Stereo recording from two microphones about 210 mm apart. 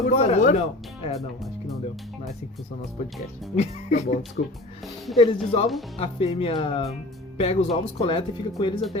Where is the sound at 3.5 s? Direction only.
30° left (ahead or behind).